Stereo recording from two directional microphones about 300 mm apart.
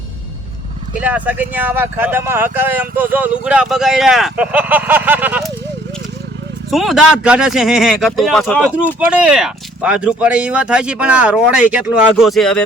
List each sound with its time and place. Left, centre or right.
0.9 s speech: centre
6.7 s speech: centre